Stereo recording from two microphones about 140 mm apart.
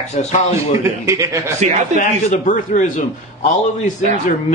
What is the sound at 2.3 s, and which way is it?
A man's voice, 60° left (ahead or behind).